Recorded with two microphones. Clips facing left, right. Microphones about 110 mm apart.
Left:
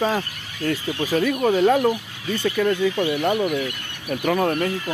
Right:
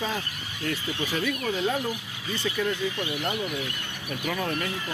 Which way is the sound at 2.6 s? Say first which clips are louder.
Left 9 dB; 80° left.